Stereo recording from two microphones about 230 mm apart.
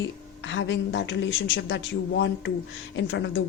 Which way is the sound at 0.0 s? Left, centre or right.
Left.